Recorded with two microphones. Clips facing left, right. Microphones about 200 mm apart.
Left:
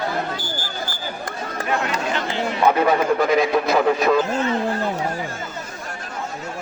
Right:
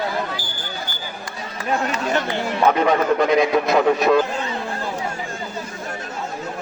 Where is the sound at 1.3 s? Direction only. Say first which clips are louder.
Left 3 dB; 55° left (ahead or behind).